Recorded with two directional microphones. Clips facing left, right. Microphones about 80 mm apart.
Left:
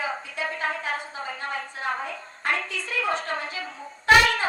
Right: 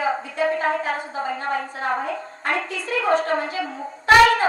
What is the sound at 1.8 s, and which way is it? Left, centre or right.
A woman's voice, right.